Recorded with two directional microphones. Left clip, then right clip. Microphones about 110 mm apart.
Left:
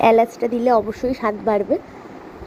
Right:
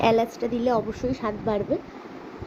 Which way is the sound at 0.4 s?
5° left (ahead or behind).